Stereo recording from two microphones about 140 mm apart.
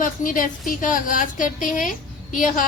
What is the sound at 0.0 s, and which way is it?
Music, 75° left (ahead or behind).